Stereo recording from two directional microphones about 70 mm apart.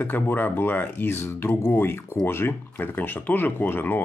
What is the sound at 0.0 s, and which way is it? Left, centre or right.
Speech, left.